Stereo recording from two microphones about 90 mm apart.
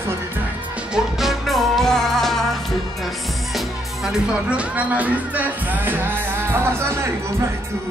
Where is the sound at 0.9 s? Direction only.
Centre (ahead or behind).